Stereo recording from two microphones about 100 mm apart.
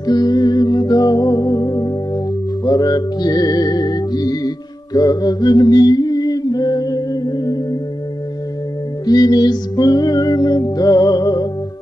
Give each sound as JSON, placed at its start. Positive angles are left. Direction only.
{"t": 0.0, "sound": "music", "side_deg": 40}
{"t": 4.9, "sound": "a sound", "side_deg": 40}
{"t": 9.0, "sound": "music", "side_deg": 40}